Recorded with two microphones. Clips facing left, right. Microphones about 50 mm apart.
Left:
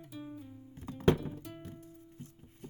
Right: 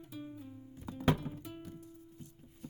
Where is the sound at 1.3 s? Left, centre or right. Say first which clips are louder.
Even; centre.